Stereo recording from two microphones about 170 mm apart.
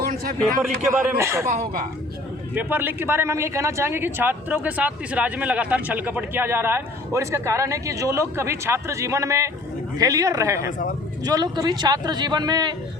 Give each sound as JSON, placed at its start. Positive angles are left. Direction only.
{"t": 0.0, "sound": "a sound", "side_deg": -60}
{"t": 1.2, "sound": "speech", "side_deg": -15}
{"t": 1.5, "sound": "speech", "side_deg": -50}
{"t": 2.6, "sound": "speech", "side_deg": -10}
{"t": 10.7, "sound": "speech", "side_deg": 50}
{"t": 11.3, "sound": "speech", "side_deg": -25}